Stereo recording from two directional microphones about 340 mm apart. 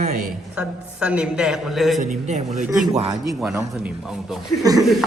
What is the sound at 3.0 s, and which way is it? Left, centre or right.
Speech, centre.